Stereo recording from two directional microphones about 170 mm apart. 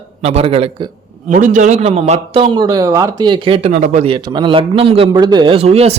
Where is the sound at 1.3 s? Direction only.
50° right (ahead or behind).